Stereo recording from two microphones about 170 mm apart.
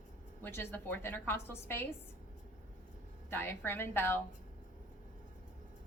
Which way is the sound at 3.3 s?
10° left (ahead or behind).